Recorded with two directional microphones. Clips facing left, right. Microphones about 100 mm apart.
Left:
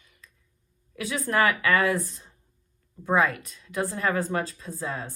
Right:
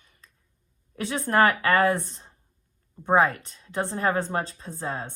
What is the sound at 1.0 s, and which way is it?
Speech, 35° right (ahead or behind).